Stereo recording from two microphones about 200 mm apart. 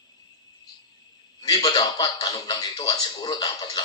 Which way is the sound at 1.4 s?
20° left (ahead or behind).